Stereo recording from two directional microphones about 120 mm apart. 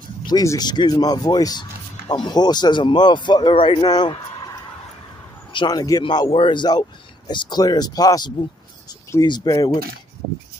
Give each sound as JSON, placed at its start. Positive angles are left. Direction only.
{"t": 0.2, "sound": "speech", "side_deg": 30}
{"t": 5.5, "sound": "speech", "side_deg": 35}